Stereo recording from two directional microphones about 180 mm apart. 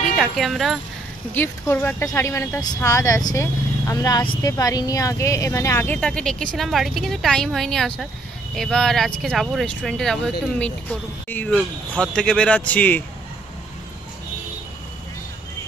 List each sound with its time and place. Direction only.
0.2 s speech: centre (ahead or behind)
1.3 s speech: 10° left (ahead or behind)